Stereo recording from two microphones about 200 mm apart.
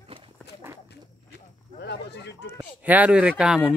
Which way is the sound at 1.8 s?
55° left (ahead or behind).